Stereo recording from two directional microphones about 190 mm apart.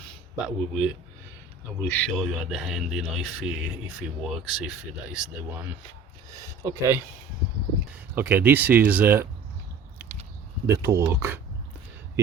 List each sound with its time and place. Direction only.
0.3 s speech: 5° right (ahead or behind)
1.8 s speech: 10° left (ahead or behind)
6.3 s speech: 15° right (ahead or behind)
10.7 s speech: 15° right (ahead or behind)